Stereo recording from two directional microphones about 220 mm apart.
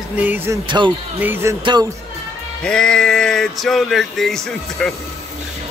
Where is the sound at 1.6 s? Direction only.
20° right (ahead or behind).